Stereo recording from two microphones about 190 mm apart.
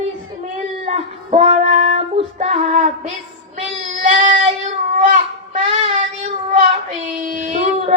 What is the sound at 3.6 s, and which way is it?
Child singing, 40° right (ahead or behind).